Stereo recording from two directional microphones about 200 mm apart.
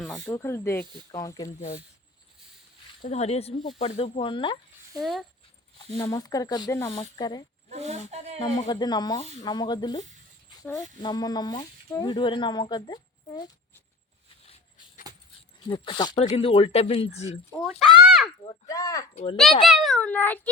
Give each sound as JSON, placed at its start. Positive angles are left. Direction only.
{"t": 0.1, "sound": "speech", "side_deg": 15}
{"t": 3.0, "sound": "speech", "side_deg": 35}
{"t": 4.9, "sound": "speech", "side_deg": 0}
{"t": 5.8, "sound": "speech", "side_deg": 20}
{"t": 7.7, "sound": "speech", "side_deg": -35}
{"t": 8.4, "sound": "speech", "side_deg": 20}
{"t": 11.0, "sound": "speech", "side_deg": 20}
{"t": 15.6, "sound": "speech", "side_deg": 25}
{"t": 17.6, "sound": "speech", "side_deg": 0}
{"t": 18.7, "sound": "a child's voice", "side_deg": 15}
{"t": 19.6, "sound": "speech", "side_deg": 0}